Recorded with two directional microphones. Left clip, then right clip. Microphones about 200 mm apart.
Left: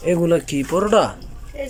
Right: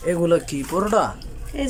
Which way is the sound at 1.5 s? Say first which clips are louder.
Right 2 dB; 35° right (ahead or behind).